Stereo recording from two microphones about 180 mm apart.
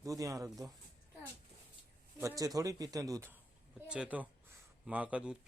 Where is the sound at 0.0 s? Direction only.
20° right (ahead or behind).